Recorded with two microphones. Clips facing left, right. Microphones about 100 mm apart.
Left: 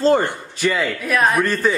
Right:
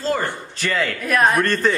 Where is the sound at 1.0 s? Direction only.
Centre (ahead or behind).